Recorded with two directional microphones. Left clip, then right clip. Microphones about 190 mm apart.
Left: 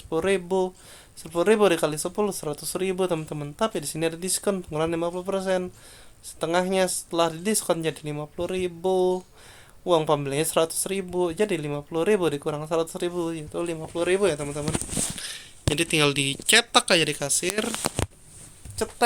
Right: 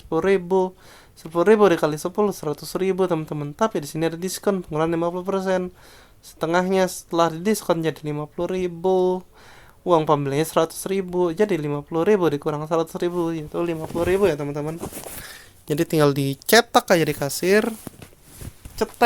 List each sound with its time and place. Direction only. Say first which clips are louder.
0.1 s speech: right 4 dB; 35° right (ahead or behind)
18.8 s speech: right 5 dB; 50° right (ahead or behind)